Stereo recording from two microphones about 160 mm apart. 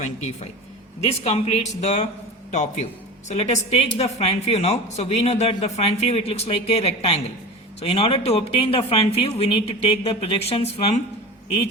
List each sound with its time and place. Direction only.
0.0 s speech: 45° left (ahead or behind)
3.2 s a woman's voice: 45° left (ahead or behind)